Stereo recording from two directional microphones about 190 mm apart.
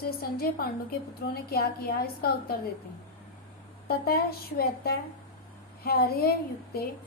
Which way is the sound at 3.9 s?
55° left (ahead or behind).